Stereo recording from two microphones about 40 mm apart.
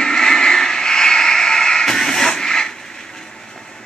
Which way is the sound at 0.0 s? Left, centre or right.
Centre.